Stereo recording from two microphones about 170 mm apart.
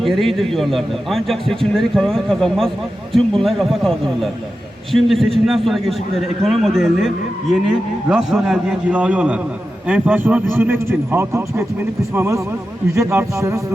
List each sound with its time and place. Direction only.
0.0 s a man's voice: centre (ahead or behind); by 13.6 s 15° right (ahead or behind)